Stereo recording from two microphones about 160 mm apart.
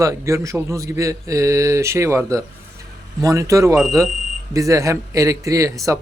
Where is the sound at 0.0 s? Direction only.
20° right (ahead or behind).